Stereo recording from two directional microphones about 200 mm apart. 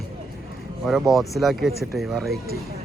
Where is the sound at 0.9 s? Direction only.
Centre (ahead or behind).